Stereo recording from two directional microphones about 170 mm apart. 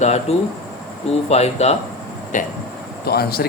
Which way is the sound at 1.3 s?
40° left (ahead or behind).